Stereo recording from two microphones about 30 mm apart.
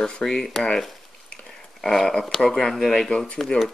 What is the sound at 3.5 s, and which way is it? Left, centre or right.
Speech, left.